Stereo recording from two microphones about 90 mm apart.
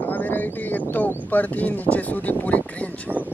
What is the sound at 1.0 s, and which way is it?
Speech, 20° left (ahead or behind).